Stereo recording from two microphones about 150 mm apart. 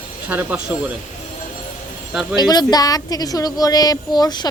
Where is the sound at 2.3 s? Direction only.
25° left (ahead or behind).